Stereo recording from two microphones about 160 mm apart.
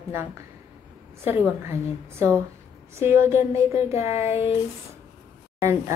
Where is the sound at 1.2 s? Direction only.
15° right (ahead or behind).